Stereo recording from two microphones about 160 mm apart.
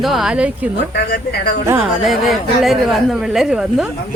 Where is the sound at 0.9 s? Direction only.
90° left.